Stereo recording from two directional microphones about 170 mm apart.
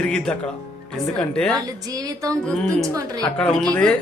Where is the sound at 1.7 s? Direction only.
20° right (ahead or behind).